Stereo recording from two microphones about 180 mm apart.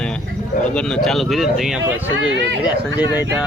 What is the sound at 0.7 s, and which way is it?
Speech, 5° left (ahead or behind).